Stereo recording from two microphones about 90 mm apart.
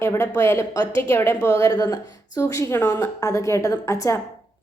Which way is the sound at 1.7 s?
50° left (ahead or behind).